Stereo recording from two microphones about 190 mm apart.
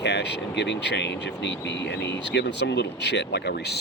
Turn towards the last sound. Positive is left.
turn(degrees=60)  # may be behind; listen again after turning